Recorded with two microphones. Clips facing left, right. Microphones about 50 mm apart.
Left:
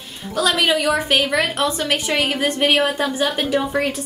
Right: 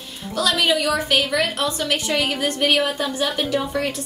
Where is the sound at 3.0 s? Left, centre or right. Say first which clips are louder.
Left 2 dB; centre.